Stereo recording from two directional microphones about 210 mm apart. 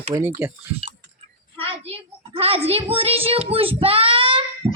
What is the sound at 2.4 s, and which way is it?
Speech, 25° right (ahead or behind).